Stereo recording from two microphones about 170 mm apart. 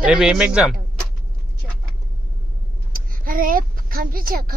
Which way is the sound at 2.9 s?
55° right (ahead or behind).